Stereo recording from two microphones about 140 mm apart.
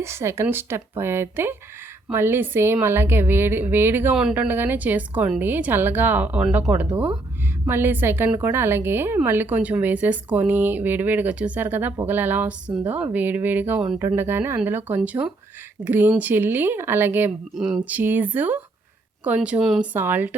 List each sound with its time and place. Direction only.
0.0 s a woman's voice: 20° right (ahead or behind)
17.5 s a sound: 5° right (ahead or behind)
17.8 s a woman's voice: 15° right (ahead or behind)
19.9 s a woman's voice: 15° right (ahead or behind)